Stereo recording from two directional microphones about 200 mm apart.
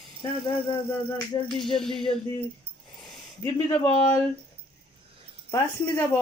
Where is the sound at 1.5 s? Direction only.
Centre (ahead or behind).